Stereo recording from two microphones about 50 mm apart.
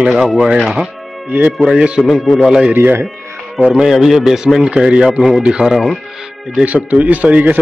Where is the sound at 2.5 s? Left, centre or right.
Centre.